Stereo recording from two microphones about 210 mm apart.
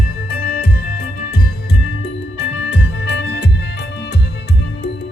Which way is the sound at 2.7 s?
60° left (ahead or behind).